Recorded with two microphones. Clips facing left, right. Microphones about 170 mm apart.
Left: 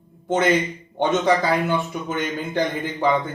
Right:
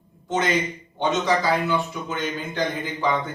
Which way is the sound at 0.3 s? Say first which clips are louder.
Left 4 dB; 55° left (ahead or behind).